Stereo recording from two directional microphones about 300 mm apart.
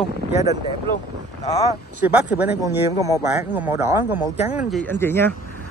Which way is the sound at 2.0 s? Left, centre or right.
Centre.